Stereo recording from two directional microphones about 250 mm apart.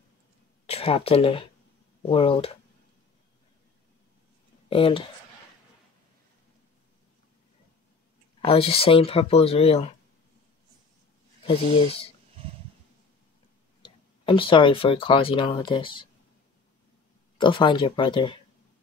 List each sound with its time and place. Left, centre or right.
0.7 s speech: left
4.6 s speech: left
8.5 s speech: left
11.4 s speech: left
13.8 s speech: centre
17.4 s speech: centre